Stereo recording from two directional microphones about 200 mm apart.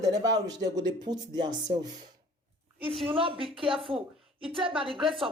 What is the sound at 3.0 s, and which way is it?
Speech, 25° right (ahead or behind).